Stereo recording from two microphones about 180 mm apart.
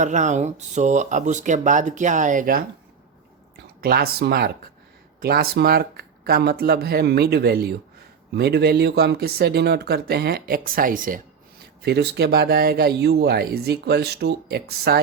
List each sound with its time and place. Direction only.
0.0 s a sound: 40° right (ahead or behind)
0.7 s speech: 40° right (ahead or behind)
3.8 s speech: 60° right (ahead or behind)
11.8 s speech: 65° right (ahead or behind)